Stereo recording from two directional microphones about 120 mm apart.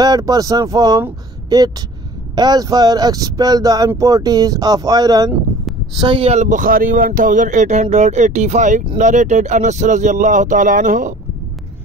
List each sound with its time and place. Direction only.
0.0 s speech: 30° right (ahead or behind)
5.9 s speech: 45° right (ahead or behind)
6.3 s speech: 85° right